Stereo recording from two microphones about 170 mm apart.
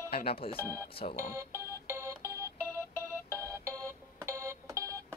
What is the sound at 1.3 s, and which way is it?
Organ, 15° right (ahead or behind).